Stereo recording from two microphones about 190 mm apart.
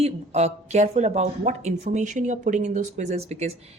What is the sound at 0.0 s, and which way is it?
Speech, 35° right (ahead or behind).